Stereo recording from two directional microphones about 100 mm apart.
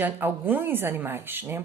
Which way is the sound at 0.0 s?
20° right (ahead or behind).